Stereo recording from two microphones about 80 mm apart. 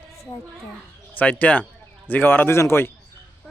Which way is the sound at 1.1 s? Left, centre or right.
Centre.